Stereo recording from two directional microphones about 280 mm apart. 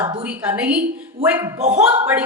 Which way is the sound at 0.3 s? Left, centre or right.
Centre.